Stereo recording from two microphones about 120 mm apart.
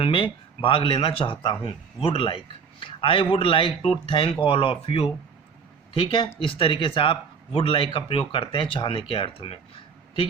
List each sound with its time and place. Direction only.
0.0 s speech: 45° left (ahead or behind)